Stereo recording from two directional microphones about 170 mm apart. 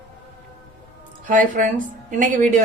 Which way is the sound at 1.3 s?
50° right (ahead or behind).